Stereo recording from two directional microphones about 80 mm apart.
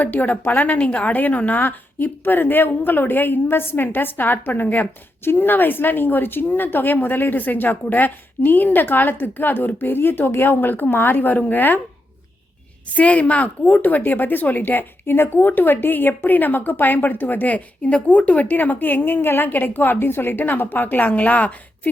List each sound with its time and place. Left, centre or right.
0.0 s a woman's voice: left
12.9 s a woman's voice: centre